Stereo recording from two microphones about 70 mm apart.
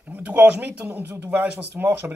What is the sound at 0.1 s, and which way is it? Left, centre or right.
Speech, right.